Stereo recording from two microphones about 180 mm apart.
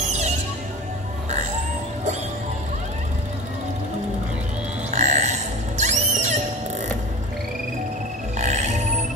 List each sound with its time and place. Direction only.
4.9 s music: 40° right (ahead or behind)
8.4 s music: 40° right (ahead or behind)